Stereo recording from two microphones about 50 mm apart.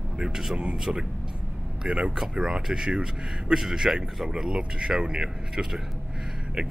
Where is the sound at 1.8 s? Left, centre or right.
Right.